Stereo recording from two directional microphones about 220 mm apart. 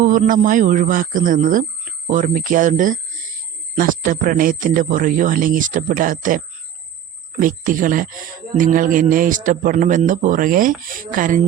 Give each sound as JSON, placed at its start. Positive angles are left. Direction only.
{"t": 0.0, "sound": "speech", "side_deg": -35}